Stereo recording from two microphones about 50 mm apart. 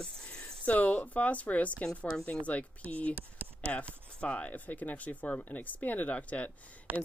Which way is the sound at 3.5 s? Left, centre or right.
Left.